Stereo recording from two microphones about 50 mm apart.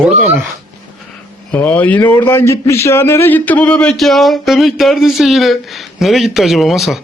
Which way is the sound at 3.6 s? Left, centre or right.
Left.